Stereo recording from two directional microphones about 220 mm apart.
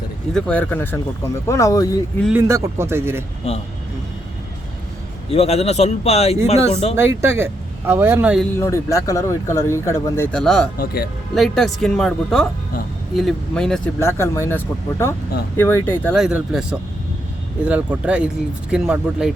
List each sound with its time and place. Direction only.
0.3 s speech: 5° left (ahead or behind)
2.2 s a man's voice: 10° right (ahead or behind)
3.4 s a man's voice: 30° left (ahead or behind)
5.3 s a man's voice: 30° left (ahead or behind)
6.9 s a man's voice: 10° right (ahead or behind)
8.5 s speech: 15° left (ahead or behind)
10.8 s speech: 40° left (ahead or behind)
11.3 s speech: centre (ahead or behind)
16.2 s speech: centre (ahead or behind)